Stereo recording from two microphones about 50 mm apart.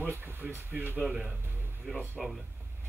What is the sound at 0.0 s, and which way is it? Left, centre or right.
Speech, right.